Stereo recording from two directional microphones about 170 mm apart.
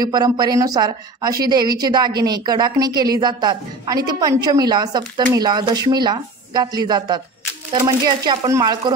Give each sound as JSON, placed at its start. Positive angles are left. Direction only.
{"t": 0.0, "sound": "a woman's voice", "side_deg": -25}